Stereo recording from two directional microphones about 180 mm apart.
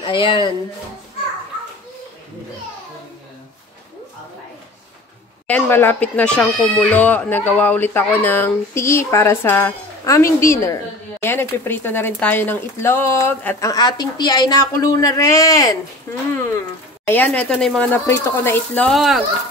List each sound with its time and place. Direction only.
0.0 s speech: 30° left (ahead or behind)
5.5 s speech: 10° left (ahead or behind)